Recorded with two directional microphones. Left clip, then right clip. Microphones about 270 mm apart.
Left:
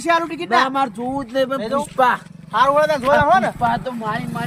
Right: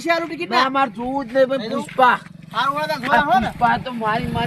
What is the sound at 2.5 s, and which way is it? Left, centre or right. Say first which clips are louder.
Speech: left 6 dB; centre.